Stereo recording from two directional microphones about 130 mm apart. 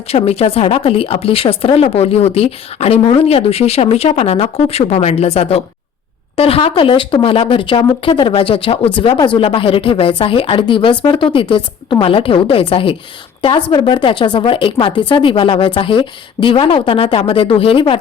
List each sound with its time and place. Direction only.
0.1 s speech: 50° left (ahead or behind)